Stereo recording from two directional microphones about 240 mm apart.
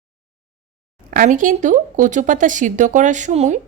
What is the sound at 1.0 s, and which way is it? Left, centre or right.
A woman's voice, right.